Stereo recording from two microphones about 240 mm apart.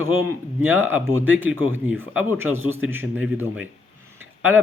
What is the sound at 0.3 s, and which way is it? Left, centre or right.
A man's voice, centre.